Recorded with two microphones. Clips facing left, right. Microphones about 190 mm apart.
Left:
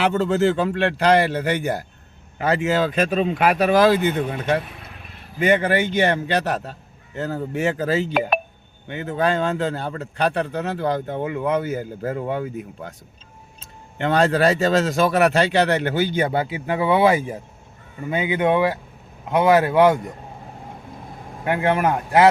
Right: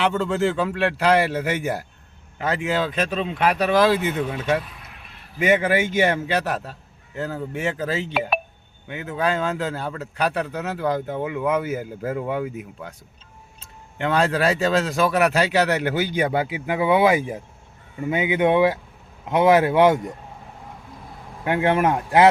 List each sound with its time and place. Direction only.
0.0 s speech: centre (ahead or behind)
14.0 s speech: centre (ahead or behind); by 20.0 s 20° right (ahead or behind)
21.4 s speech: 25° right (ahead or behind)